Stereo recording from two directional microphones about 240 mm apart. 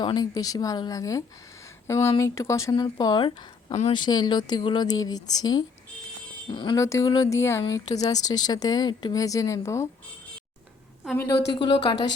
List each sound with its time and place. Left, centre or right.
0.0 s speech: centre
11.0 s a woman's voice: centre
11.5 s speech: left